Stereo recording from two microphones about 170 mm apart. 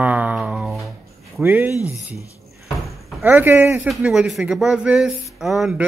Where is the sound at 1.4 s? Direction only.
10° right (ahead or behind).